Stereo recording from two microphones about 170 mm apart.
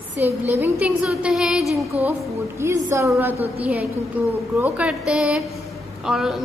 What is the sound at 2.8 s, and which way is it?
A woman's voice, 15° right (ahead or behind).